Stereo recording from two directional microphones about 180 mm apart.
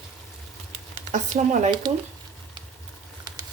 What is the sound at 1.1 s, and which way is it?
Speech, 40° right (ahead or behind).